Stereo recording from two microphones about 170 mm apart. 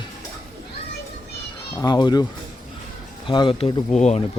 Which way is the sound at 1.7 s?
25° left (ahead or behind).